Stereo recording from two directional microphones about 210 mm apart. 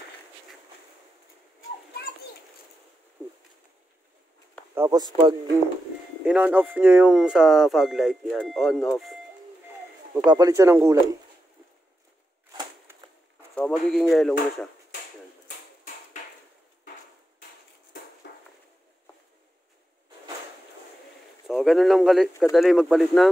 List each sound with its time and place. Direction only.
3.2 s a sound: 10° right (ahead or behind)
4.7 s speech: 15° right (ahead or behind)
6.2 s speech: 5° right (ahead or behind)
10.1 s speech: 20° right (ahead or behind)
13.6 s speech: 5° left (ahead or behind)
15.4 s a sound: 40° left (ahead or behind)
21.5 s speech: centre (ahead or behind)